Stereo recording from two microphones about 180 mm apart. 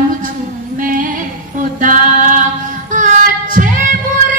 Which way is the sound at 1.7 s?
45° right (ahead or behind).